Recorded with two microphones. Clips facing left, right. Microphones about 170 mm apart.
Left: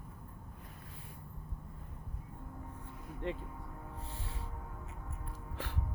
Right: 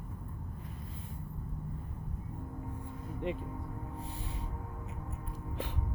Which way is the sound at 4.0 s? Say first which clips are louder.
Right 4 dB; 15° right (ahead or behind).